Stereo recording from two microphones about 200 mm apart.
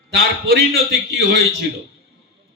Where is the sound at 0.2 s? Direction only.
55° right (ahead or behind).